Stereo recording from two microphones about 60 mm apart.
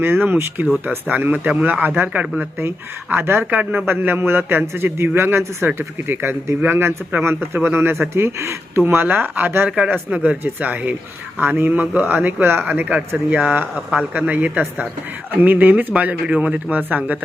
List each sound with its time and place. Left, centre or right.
0.0 s a man's voice: right
3.5 s a man's voice: right
9.6 s a man's voice: centre